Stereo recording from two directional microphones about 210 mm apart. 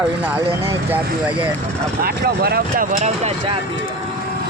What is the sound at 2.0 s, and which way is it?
Speech, 50° right (ahead or behind).